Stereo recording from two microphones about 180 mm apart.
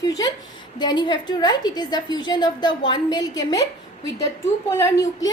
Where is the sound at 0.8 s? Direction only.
25° left (ahead or behind).